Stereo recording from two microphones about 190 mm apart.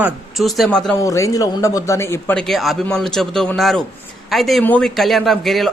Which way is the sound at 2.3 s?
Centre (ahead or behind).